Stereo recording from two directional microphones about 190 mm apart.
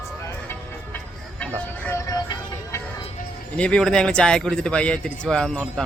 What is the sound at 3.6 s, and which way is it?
A man's voice, 5° left (ahead or behind).